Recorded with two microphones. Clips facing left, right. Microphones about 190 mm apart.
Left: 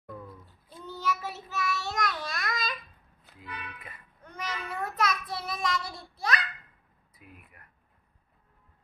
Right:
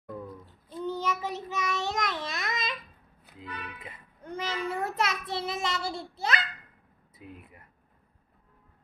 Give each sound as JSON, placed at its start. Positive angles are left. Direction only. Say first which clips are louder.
{"t": 0.1, "sound": "a sound", "louder": "right 4 dB", "side_deg": -15}
{"t": 0.8, "sound": "child singing", "louder": "right 2 dB", "side_deg": -20}
{"t": 4.2, "sound": "child singing", "louder": "right 5 dB", "side_deg": -30}
{"t": 7.2, "sound": "speech", "louder": "right 7 dB", "side_deg": -25}